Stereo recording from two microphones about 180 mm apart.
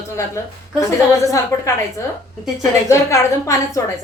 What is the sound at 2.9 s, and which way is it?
Speech, 15° left (ahead or behind).